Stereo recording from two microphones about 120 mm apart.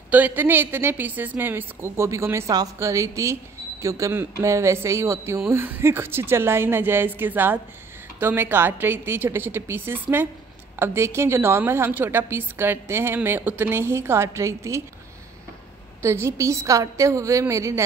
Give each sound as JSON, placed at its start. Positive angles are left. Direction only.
{"t": 0.1, "sound": "a woman's voice", "side_deg": -15}
{"t": 16.0, "sound": "a woman's voice", "side_deg": -20}